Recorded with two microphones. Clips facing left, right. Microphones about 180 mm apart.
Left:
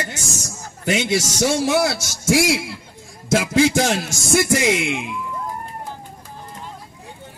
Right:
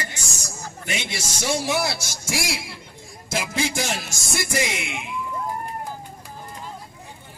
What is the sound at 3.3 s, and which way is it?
A man's voice, 85° left.